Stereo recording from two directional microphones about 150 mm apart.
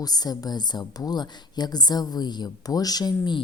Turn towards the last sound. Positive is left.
turn(degrees=25)  # may be behind; listen again after turning